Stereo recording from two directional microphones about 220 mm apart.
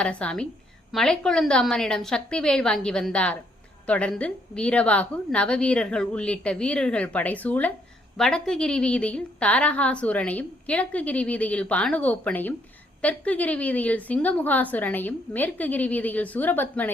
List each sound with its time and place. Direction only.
0.0 s a woman's voice: 5° left (ahead or behind)